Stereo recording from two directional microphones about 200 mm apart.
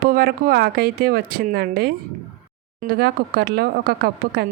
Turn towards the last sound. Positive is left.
turn(degrees=-50)  # may be behind; listen again after turning